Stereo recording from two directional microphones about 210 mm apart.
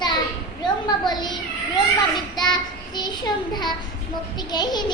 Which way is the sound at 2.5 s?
20° left (ahead or behind).